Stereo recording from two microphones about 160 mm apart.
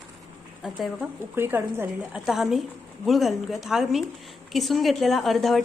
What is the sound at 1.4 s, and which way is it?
Speech, 15° right (ahead or behind).